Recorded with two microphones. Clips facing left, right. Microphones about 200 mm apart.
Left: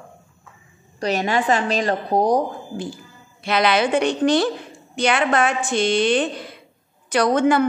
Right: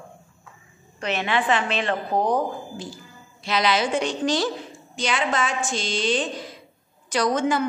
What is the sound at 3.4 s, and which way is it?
A woman's voice, 60° left (ahead or behind).